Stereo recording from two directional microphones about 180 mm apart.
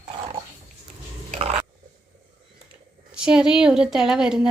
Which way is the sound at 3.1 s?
5° right (ahead or behind).